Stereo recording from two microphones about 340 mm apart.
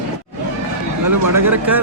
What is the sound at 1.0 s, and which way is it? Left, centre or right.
Speech, right.